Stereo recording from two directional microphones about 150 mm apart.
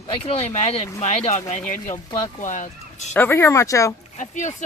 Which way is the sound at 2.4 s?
55° left (ahead or behind).